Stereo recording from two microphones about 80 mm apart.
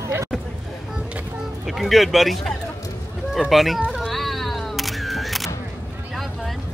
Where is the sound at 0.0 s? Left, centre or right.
Right.